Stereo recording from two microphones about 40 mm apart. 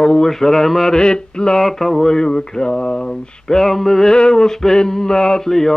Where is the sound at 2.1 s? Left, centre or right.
Centre.